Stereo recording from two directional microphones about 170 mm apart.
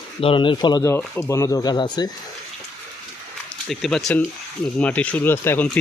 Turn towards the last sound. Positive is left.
turn(degrees=15)  # may be behind; listen again after turning